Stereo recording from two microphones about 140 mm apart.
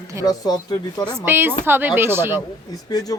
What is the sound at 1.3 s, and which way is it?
A woman's voice, 15° right (ahead or behind).